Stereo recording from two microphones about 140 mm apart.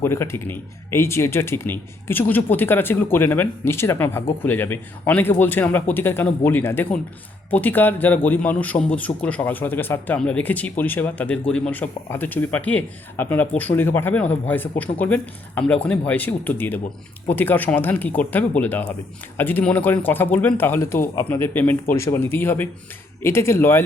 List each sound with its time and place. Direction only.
0.0 s a man's voice: 20° left (ahead or behind)